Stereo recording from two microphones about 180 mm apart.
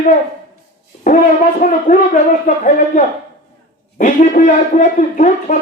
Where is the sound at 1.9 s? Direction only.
45° left (ahead or behind).